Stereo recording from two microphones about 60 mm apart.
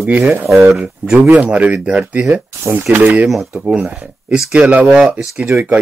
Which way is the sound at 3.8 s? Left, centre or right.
Centre.